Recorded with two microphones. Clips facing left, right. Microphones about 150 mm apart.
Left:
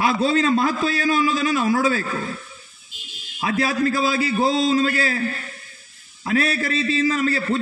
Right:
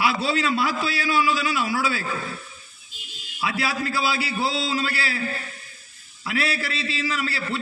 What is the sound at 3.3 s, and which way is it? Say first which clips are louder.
A man's voice: left 5 dB; 40° left (ahead or behind).